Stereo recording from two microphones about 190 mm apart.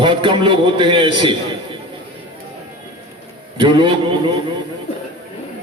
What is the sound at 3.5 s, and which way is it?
Speech, 25° right (ahead or behind).